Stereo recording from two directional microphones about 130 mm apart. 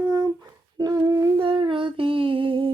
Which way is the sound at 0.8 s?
30° right (ahead or behind).